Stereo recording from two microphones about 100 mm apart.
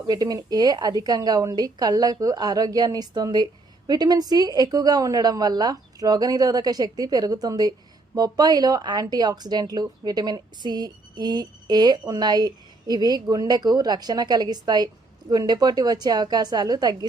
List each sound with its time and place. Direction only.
0.1 s a woman's voice: 40° right (ahead or behind)